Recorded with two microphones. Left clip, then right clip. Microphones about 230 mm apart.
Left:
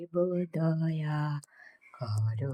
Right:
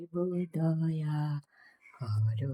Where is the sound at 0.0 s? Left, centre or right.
Centre.